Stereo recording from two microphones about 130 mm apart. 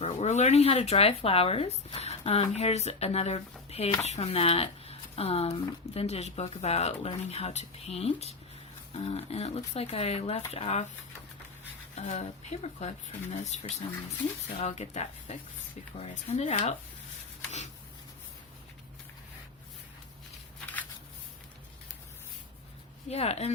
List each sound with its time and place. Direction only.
0.0 s speech: 60° left (ahead or behind)
11.9 s speech: 60° left (ahead or behind)
23.0 s speech: 55° left (ahead or behind)